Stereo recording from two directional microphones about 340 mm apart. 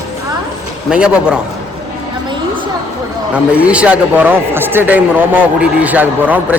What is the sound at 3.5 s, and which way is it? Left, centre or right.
A man's voice, centre.